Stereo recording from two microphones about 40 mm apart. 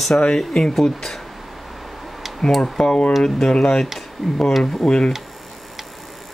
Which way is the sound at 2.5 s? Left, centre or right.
Centre.